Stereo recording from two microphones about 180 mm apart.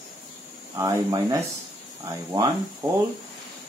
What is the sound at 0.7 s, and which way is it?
Speech, 20° right (ahead or behind).